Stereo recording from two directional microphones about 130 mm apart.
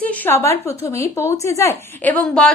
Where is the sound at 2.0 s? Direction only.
10° left (ahead or behind).